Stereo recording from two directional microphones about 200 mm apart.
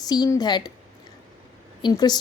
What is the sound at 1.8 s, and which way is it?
Speech, 20° left (ahead or behind).